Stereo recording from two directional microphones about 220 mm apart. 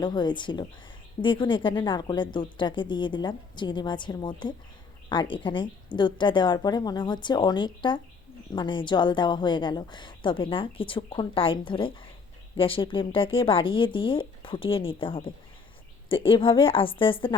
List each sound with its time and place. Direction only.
0.0 s a woman's voice: 20° left (ahead or behind)